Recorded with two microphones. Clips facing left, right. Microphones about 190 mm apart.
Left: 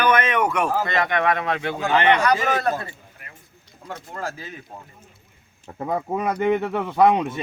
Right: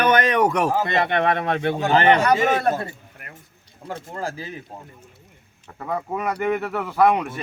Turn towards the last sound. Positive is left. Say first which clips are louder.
# left 1 dB
turn(degrees=20)  # may be behind; listen again after turning